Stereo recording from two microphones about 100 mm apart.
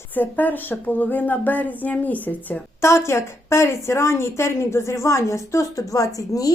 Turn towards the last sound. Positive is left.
turn(degrees=35)  # may be behind; listen again after turning